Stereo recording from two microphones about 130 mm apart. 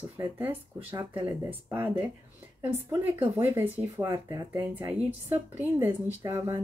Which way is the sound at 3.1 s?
15° right (ahead or behind).